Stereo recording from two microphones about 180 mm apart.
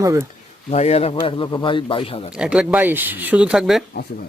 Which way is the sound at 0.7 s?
35° left (ahead or behind).